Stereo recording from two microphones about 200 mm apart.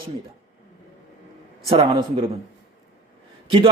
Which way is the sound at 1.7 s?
25° right (ahead or behind).